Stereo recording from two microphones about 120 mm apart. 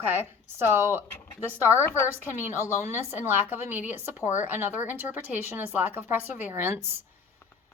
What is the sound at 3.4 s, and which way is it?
A woman's voice, 15° right (ahead or behind).